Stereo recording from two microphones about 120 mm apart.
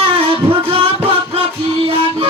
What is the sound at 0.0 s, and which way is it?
Music, 55° right (ahead or behind).